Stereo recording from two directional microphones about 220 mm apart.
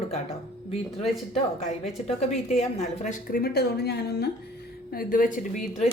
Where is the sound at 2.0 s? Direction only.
30° left (ahead or behind).